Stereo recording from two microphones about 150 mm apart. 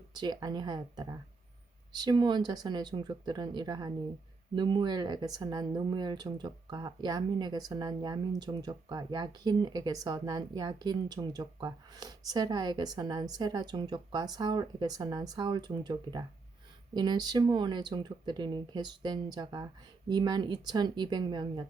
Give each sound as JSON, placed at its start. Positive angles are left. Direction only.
{"t": 0.1, "sound": "speech", "side_deg": -30}